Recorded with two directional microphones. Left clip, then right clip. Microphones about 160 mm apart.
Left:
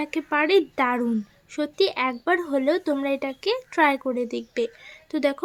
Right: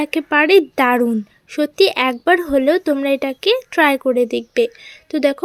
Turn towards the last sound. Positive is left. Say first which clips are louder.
# right 7 dB
turn(degrees=-20)  # may be behind; listen again after turning